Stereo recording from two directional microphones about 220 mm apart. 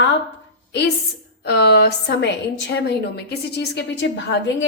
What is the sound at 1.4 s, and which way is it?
A woman's voice, 45° left (ahead or behind).